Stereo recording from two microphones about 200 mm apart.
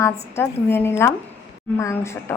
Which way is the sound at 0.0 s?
10° left (ahead or behind).